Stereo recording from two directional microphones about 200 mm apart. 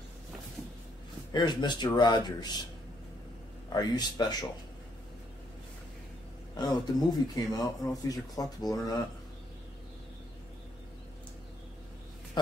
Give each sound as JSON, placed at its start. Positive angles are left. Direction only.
{"t": 1.3, "sound": "speech", "side_deg": 20}
{"t": 3.7, "sound": "speech", "side_deg": 20}
{"t": 6.5, "sound": "speech", "side_deg": 20}